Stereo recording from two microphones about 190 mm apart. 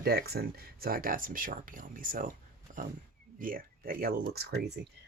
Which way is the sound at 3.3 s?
50° right (ahead or behind).